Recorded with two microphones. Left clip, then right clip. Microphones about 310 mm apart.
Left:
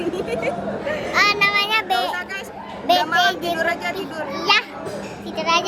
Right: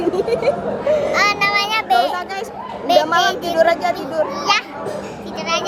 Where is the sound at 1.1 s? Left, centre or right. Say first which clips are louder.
Right 1 dB; centre.